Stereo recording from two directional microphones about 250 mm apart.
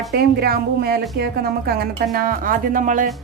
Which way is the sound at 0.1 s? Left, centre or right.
Right.